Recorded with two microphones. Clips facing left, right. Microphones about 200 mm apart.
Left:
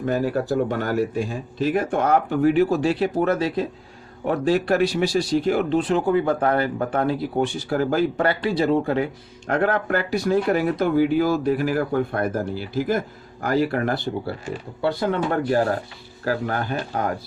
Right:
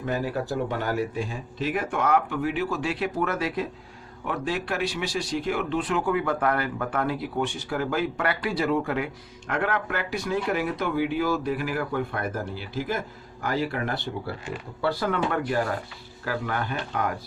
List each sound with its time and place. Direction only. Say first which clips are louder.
0.0 s speech: left 5 dB; 45° left (ahead or behind)